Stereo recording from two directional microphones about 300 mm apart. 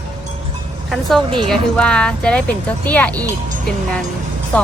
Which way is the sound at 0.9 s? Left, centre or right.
Centre.